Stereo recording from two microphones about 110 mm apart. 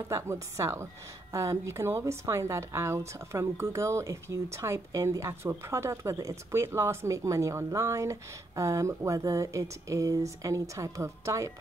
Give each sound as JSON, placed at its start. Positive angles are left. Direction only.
{"t": 0.1, "sound": "a woman's voice", "side_deg": -25}